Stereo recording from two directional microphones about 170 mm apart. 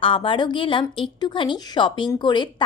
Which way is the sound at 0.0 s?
30° left (ahead or behind).